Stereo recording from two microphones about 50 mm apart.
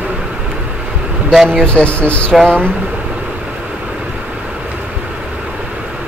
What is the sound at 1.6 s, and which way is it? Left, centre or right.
Speech, left.